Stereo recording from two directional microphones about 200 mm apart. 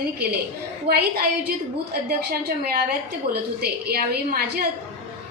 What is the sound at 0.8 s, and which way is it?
Speech, 50° right (ahead or behind).